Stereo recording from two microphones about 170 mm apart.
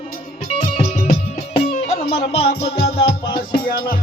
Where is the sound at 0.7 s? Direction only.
40° left (ahead or behind).